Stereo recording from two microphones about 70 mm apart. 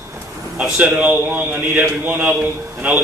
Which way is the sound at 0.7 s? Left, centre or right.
Right.